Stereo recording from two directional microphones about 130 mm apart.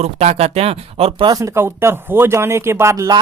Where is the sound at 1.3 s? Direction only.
25° right (ahead or behind).